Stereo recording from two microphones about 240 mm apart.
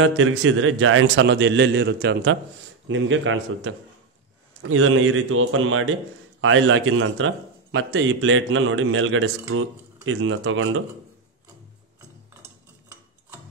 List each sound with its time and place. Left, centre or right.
0.0 s a man's voice: right